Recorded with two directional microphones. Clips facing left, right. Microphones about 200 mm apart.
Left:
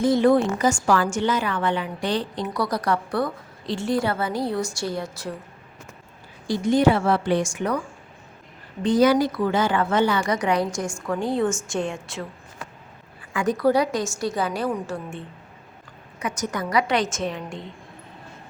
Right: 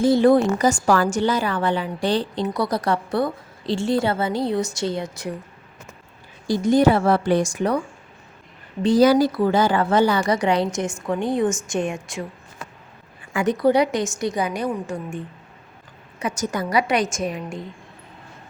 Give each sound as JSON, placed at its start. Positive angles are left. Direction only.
{"t": 0.0, "sound": "a woman's voice", "side_deg": -30}
{"t": 6.5, "sound": "a woman's voice", "side_deg": -40}
{"t": 9.0, "sound": "a woman's voice", "side_deg": -35}
{"t": 13.3, "sound": "a woman's voice", "side_deg": -20}
{"t": 16.2, "sound": "a woman's voice", "side_deg": -30}